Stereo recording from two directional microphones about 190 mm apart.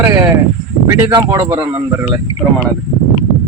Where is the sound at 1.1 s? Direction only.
25° right (ahead or behind).